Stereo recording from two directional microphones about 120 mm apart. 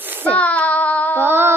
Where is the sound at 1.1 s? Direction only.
20° right (ahead or behind).